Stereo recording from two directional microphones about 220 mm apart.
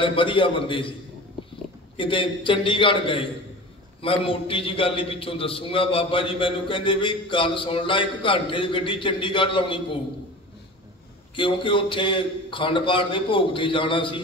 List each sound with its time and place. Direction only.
0.0 s a man's voice: 25° left (ahead or behind)
2.0 s a man's voice: 25° left (ahead or behind)
11.3 s a man's voice: 25° left (ahead or behind)